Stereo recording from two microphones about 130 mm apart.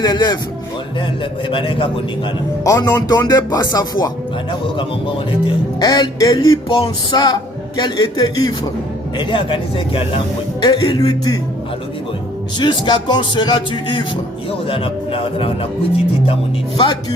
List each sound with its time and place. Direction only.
0.0 s a man's voice: 30° left (ahead or behind)
2.6 s a man's voice: 30° left (ahead or behind)
4.6 s a man's voice: 40° left (ahead or behind)
10.6 s a man's voice: 30° left (ahead or behind)
12.5 s a man's voice: 35° left (ahead or behind)